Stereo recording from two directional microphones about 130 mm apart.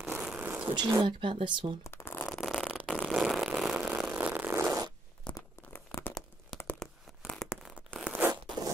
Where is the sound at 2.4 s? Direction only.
Centre (ahead or behind).